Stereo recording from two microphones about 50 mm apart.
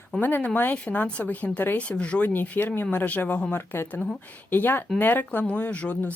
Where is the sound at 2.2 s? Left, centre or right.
Left.